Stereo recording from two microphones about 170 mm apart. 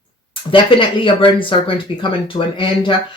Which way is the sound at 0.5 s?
30° left (ahead or behind).